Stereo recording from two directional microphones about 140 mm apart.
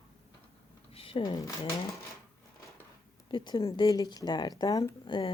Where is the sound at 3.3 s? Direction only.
35° left (ahead or behind).